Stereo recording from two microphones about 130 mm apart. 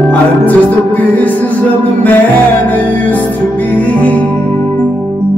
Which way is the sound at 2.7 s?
15° left (ahead or behind).